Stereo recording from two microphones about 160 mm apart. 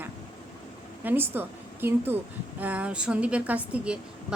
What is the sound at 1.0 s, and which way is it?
A woman's voice, 15° right (ahead or behind).